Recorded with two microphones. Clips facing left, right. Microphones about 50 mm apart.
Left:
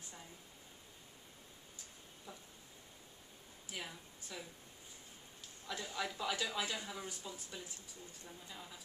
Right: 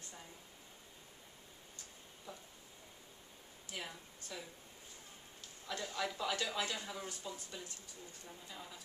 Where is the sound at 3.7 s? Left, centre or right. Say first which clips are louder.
Right 1 dB; centre.